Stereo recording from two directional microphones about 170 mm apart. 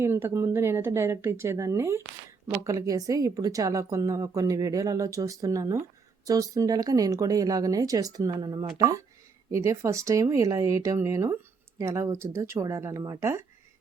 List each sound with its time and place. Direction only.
0.0 s a woman's voice: 15° right (ahead or behind)